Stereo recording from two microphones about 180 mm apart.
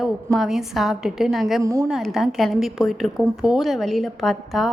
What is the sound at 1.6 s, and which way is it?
Speech, 20° right (ahead or behind).